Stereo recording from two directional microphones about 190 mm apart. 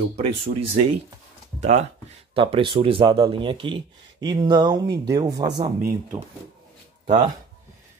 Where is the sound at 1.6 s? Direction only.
35° right (ahead or behind).